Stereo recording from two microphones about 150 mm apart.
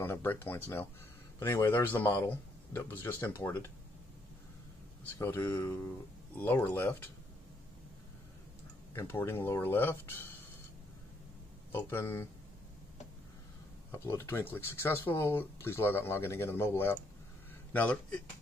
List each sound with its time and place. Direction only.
0.0 s speech: 15° left (ahead or behind)
5.2 s speech: 15° left (ahead or behind)
8.9 s speech: 15° left (ahead or behind)
11.7 s speech: 15° left (ahead or behind)
13.9 s speech: 15° left (ahead or behind)